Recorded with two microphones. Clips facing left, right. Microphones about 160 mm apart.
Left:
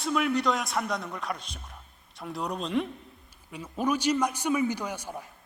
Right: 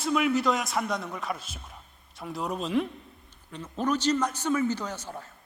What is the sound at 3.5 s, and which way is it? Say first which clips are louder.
A man's voice: even; 10° left (ahead or behind).